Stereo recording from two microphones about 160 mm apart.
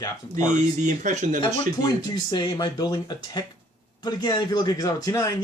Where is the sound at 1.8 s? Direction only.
25° left (ahead or behind).